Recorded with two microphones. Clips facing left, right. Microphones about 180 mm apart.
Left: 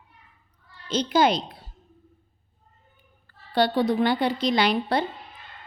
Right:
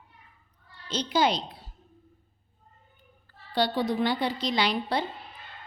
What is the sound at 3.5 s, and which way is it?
A woman's voice, 55° left (ahead or behind).